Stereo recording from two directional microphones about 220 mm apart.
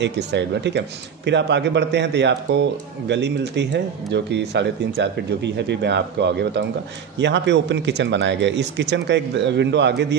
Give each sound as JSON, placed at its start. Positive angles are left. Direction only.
{"t": 0.0, "sound": "speech", "side_deg": -50}